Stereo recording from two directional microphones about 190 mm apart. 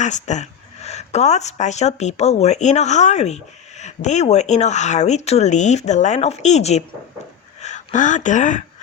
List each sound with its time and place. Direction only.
0.0 s speech: 40° left (ahead or behind)